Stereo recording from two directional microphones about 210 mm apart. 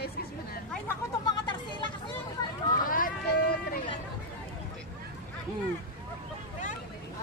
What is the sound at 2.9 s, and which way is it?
Run, 40° left (ahead or behind).